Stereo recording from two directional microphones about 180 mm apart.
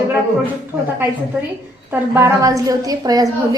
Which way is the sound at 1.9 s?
15° right (ahead or behind).